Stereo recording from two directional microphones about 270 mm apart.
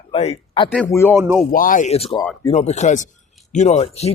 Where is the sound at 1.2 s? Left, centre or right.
Centre.